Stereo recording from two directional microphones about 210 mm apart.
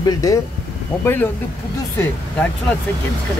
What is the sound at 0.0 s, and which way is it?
Speech, 15° left (ahead or behind).